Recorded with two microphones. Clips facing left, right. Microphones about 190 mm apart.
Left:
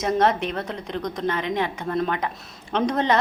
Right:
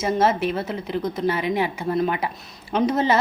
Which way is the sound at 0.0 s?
5° right (ahead or behind).